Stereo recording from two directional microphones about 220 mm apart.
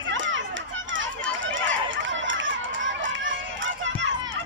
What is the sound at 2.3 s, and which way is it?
Run, 60° right (ahead or behind).